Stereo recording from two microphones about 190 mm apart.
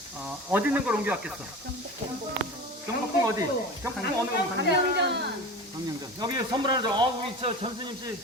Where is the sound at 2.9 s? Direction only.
15° right (ahead or behind).